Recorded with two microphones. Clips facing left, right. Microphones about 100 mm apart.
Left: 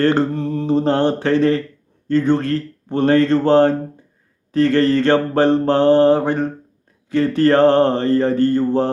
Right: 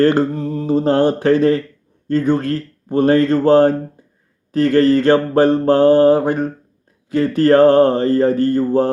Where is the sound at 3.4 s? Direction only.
25° left (ahead or behind).